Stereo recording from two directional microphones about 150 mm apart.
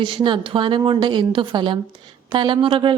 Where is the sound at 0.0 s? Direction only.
35° right (ahead or behind).